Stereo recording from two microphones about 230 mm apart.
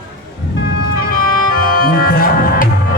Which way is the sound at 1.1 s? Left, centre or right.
Left.